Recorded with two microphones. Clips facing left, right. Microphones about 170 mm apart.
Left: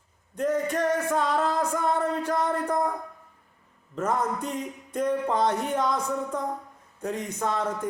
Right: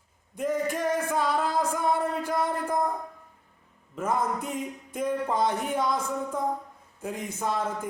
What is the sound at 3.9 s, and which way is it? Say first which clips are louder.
Speech: left 1 dB; 10° right (ahead or behind).